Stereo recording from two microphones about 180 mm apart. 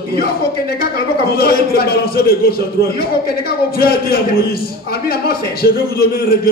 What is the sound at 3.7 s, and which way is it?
A man's voice, 55° left (ahead or behind).